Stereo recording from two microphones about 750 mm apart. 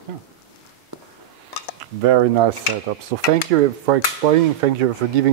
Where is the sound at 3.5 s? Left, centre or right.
Right.